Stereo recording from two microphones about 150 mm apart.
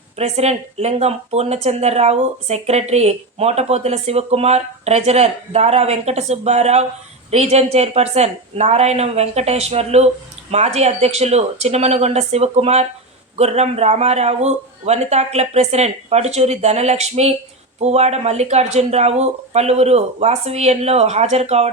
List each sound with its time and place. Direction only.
0.2 s speech: 45° right (ahead or behind)